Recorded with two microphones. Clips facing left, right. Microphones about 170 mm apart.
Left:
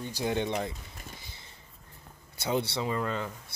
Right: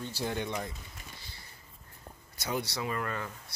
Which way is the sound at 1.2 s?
20° left (ahead or behind).